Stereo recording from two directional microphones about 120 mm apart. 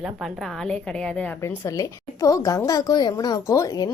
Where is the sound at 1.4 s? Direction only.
25° left (ahead or behind).